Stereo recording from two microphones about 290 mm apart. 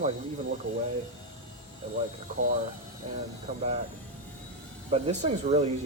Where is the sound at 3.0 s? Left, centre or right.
Right.